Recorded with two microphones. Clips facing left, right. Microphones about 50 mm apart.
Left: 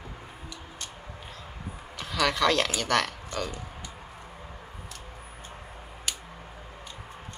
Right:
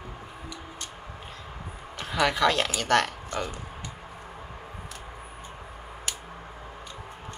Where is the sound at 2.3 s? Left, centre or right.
Centre.